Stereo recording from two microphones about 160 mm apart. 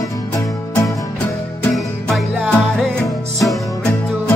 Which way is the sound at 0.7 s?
15° left (ahead or behind).